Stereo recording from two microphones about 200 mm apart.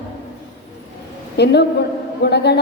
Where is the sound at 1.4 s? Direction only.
55° left (ahead or behind).